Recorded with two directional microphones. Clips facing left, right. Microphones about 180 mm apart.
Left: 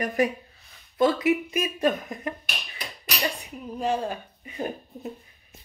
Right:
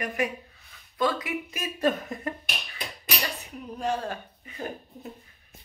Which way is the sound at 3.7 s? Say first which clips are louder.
Left 3 dB; 10° left (ahead or behind).